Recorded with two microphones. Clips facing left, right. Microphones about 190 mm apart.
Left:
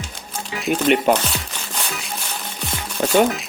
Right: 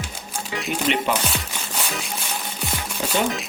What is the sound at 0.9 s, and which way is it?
Speech, 50° left (ahead or behind).